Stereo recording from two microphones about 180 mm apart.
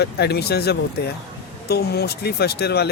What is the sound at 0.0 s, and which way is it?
Speech, 65° left (ahead or behind).